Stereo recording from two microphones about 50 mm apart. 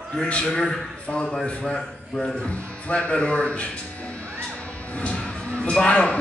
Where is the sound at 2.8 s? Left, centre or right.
Left.